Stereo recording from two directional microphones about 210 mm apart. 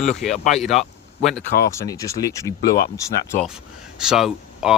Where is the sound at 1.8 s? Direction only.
15° left (ahead or behind).